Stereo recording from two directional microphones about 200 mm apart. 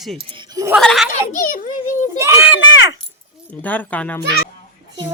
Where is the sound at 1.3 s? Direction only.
40° left (ahead or behind).